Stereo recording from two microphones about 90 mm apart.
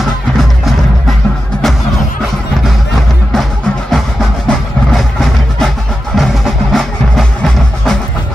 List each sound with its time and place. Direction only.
3.9 s music: 5° left (ahead or behind)